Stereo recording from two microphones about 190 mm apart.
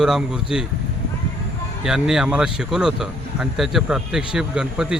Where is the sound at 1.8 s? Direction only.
5° right (ahead or behind).